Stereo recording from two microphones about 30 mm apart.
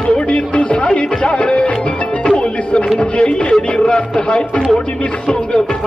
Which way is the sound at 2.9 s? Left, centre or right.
Left.